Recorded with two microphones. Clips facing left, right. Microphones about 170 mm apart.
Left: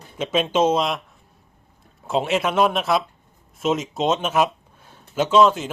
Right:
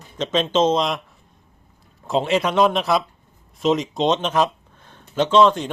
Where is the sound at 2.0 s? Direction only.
Centre (ahead or behind).